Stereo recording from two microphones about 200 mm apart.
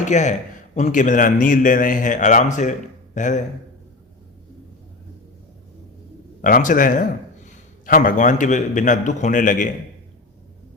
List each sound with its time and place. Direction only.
0.0 s a man's voice: 35° left (ahead or behind)
6.4 s a man's voice: 40° left (ahead or behind)